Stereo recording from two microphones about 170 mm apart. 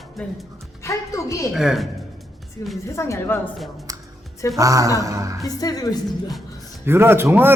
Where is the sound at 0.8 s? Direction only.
15° left (ahead or behind).